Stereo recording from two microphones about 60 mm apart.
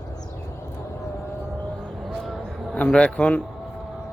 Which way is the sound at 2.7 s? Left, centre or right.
Centre.